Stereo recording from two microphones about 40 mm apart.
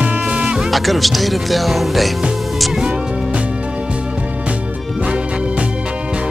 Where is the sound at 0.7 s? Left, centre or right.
Centre.